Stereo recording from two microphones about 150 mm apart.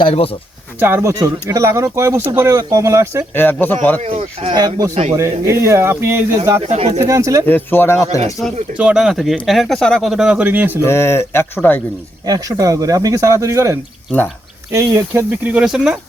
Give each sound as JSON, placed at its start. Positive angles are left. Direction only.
{"t": 0.0, "sound": "speech", "side_deg": 40}
{"t": 0.8, "sound": "speech", "side_deg": -15}
{"t": 3.3, "sound": "speech", "side_deg": 10}
{"t": 4.0, "sound": "speech", "side_deg": -40}
{"t": 4.5, "sound": "speech", "side_deg": -25}
{"t": 6.7, "sound": "speech", "side_deg": -45}
{"t": 7.0, "sound": "speech", "side_deg": -20}
{"t": 7.4, "sound": "speech", "side_deg": 15}
{"t": 8.8, "sound": "speech", "side_deg": -5}
{"t": 10.8, "sound": "speech", "side_deg": 15}
{"t": 12.2, "sound": "speech", "side_deg": -25}